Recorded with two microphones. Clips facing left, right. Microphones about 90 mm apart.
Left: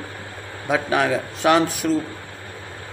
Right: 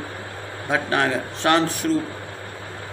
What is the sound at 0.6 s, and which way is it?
A man's voice, 10° left (ahead or behind).